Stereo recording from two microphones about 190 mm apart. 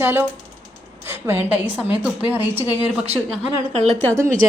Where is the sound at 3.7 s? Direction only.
35° right (ahead or behind).